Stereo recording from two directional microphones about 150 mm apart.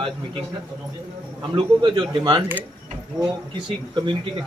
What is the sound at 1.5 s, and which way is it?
Speech, 35° right (ahead or behind).